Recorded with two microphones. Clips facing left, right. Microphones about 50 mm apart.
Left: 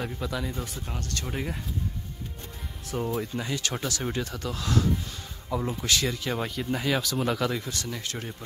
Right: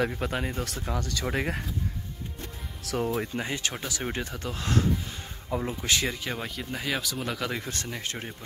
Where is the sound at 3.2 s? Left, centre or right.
Right.